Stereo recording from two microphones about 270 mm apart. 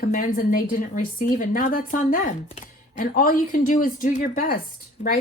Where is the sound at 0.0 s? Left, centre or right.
Left.